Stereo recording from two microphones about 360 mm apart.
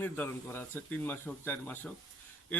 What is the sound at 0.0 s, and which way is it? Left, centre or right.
A man's voice, centre.